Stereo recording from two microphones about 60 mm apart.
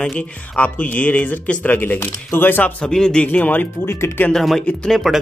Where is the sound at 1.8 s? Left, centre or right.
Left.